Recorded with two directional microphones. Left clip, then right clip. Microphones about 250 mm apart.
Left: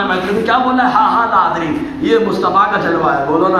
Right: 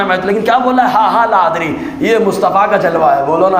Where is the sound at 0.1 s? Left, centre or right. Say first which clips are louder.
Right 3 dB; right.